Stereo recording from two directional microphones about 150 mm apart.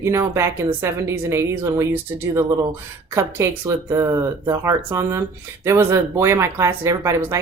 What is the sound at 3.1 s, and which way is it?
Speech, 20° right (ahead or behind).